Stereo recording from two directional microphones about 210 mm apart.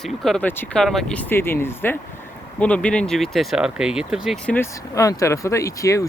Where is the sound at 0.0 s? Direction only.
Centre (ahead or behind).